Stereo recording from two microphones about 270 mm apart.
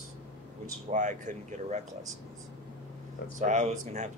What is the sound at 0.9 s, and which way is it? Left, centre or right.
Speech, right.